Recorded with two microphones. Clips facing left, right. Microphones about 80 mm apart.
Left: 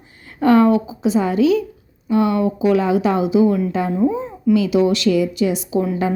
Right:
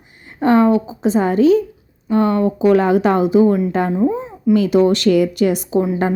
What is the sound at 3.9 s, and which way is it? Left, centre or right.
Speech, centre.